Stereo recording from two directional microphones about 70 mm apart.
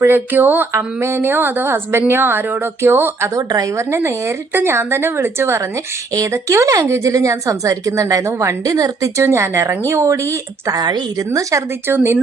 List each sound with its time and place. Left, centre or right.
0.0 s a sound: right
0.7 s a woman's voice: right
3.3 s a woman's voice: right
3.8 s a woman's voice: right
10.8 s a woman's voice: right
11.5 s a woman's voice: right
11.9 s a woman's voice: right